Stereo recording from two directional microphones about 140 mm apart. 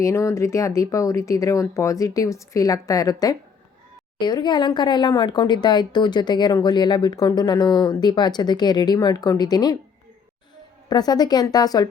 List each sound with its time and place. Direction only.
0.0 s speech: 20° left (ahead or behind)
10.8 s speech: 30° left (ahead or behind)